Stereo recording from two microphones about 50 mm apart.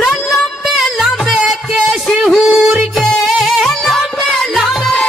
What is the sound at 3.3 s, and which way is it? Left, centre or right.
Music, centre.